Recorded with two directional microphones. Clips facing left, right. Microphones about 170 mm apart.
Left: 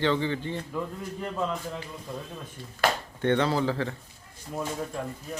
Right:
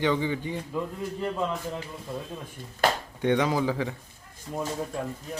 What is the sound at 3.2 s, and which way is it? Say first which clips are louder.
Speech: even; 10° right (ahead or behind).